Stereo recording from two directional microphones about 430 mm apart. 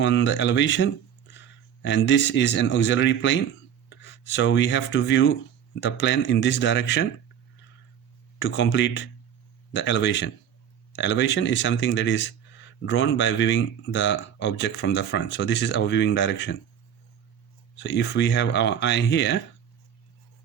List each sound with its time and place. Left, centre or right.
0.0 s speech: left
8.4 s speech: left
17.7 s speech: left